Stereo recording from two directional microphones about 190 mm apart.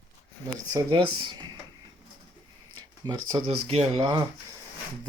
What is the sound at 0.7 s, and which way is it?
Speech, 25° right (ahead or behind).